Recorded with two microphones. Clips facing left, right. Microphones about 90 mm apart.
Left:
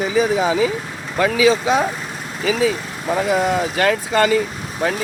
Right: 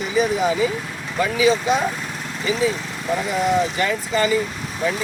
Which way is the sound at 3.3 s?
80° left.